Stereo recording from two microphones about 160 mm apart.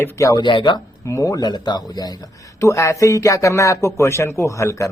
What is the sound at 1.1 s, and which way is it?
Speech, 20° left (ahead or behind).